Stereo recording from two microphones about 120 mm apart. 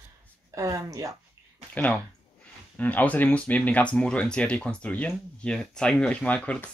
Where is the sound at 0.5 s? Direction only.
30° right (ahead or behind).